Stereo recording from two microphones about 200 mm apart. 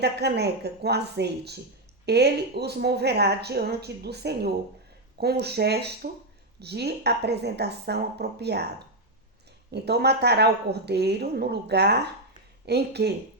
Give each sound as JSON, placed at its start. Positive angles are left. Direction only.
{"t": 0.0, "sound": "a woman's voice", "side_deg": -55}
{"t": 9.7, "sound": "a woman's voice", "side_deg": -55}